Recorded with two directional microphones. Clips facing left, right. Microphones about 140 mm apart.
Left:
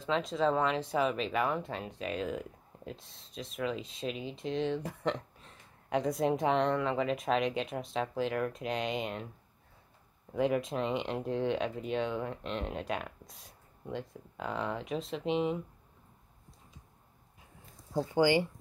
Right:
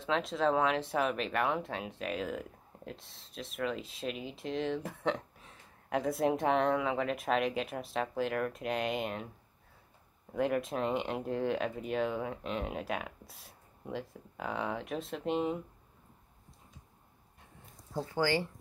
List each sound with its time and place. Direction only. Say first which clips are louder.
0.0 s speech: left 1 dB; centre (ahead or behind)
10.3 s speech: left 1 dB; centre (ahead or behind)
17.9 s speech: left 4 dB; 15° left (ahead or behind)